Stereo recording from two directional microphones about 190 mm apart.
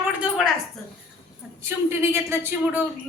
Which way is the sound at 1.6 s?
10° right (ahead or behind).